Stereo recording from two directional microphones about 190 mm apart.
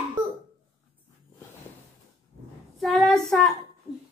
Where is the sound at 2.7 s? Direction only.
Centre (ahead or behind).